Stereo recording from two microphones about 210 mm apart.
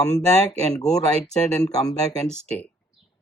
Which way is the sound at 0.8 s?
5° left (ahead or behind).